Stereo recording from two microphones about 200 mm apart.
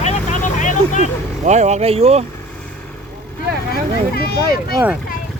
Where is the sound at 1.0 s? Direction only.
35° right (ahead or behind).